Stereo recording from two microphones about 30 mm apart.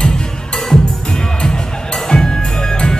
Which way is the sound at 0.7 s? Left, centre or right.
Left.